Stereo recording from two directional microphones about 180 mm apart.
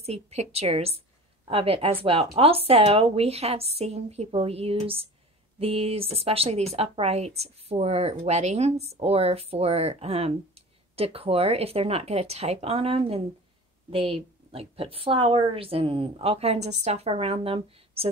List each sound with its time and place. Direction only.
0.0 s speech: 35° right (ahead or behind)